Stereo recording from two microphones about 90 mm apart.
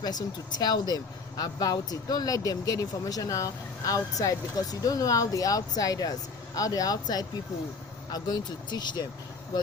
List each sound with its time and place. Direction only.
0.0 s speech: 50° left (ahead or behind)